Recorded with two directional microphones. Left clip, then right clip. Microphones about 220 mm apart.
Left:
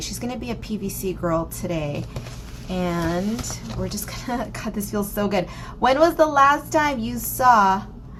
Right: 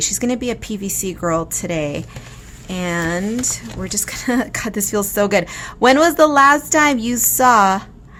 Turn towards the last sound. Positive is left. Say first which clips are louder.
# right 3 dB
turn(degrees=-50)  # may be behind; listen again after turning